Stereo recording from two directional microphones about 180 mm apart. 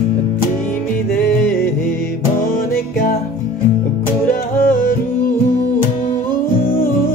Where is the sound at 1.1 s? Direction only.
55° left (ahead or behind).